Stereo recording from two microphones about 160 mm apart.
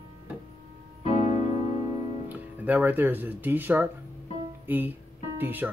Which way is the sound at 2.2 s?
10° right (ahead or behind).